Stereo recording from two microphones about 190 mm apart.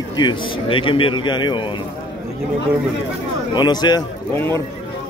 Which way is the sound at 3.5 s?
20° left (ahead or behind).